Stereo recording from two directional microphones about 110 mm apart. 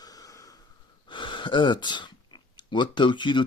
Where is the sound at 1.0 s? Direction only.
45° left (ahead or behind).